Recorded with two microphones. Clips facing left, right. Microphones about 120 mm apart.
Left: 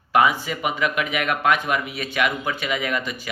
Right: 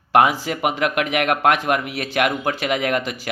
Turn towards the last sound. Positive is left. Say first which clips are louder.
# right 4 dB
turn(degrees=-65)  # may be behind; listen again after turning